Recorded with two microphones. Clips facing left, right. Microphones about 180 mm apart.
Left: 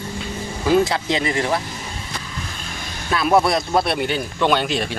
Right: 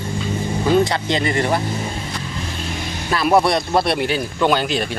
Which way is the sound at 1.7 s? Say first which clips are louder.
Right 8 dB; 35° right (ahead or behind).